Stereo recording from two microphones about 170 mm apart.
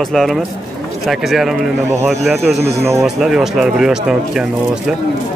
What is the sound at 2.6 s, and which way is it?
Speech, 15° right (ahead or behind).